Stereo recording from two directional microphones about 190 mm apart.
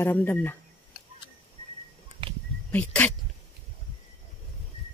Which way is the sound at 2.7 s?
5° left (ahead or behind).